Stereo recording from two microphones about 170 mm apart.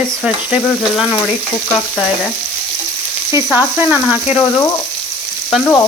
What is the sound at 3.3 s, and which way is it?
Frying, 15° right (ahead or behind).